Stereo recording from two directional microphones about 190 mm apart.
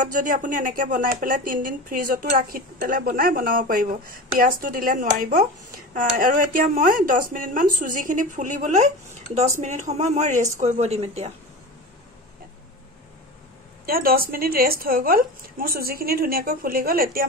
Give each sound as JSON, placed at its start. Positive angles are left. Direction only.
{"t": 0.0, "sound": "speech", "side_deg": -45}
{"t": 13.8, "sound": "speech", "side_deg": -50}